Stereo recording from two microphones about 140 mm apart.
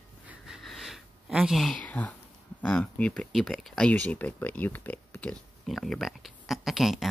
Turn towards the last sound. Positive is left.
turn(degrees=0)  # may be behind; listen again after turning